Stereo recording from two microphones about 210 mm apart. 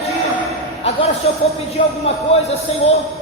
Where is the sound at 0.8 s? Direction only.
30° left (ahead or behind).